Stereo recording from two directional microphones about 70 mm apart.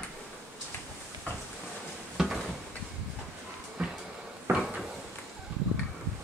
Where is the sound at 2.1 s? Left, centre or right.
Centre.